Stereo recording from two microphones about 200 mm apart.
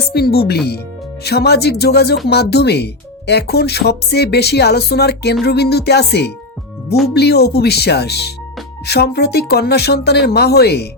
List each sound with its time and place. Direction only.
0.1 s speech: 50° left (ahead or behind)